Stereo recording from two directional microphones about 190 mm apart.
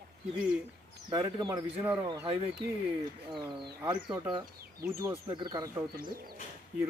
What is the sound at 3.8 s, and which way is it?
Speech, 25° right (ahead or behind).